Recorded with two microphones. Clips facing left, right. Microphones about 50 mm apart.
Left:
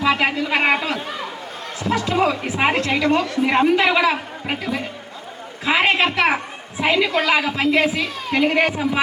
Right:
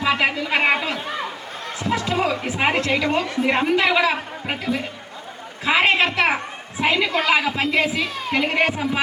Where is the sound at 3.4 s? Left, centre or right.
Centre.